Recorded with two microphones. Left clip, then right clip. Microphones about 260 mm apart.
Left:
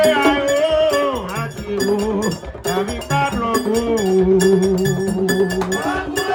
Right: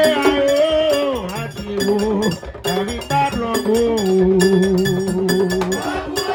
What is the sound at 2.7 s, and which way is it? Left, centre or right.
Music, right.